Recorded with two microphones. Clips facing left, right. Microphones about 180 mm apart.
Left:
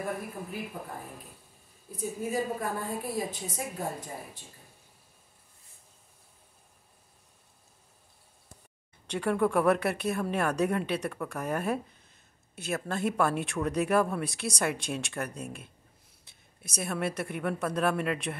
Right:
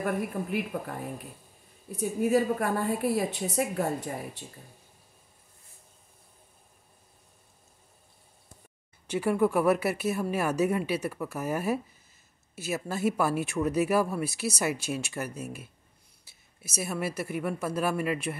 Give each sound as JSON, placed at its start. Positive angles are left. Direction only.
{"t": 0.7, "sound": "a woman's voice", "side_deg": -75}
{"t": 9.0, "sound": "speech", "side_deg": -5}